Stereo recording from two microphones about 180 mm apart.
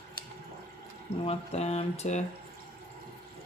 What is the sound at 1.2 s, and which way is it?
Speech, 35° left (ahead or behind).